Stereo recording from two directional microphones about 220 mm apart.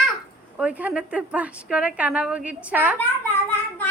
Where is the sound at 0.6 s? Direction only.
5° right (ahead or behind).